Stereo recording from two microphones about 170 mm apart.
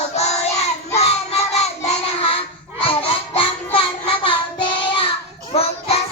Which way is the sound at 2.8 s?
30° left (ahead or behind).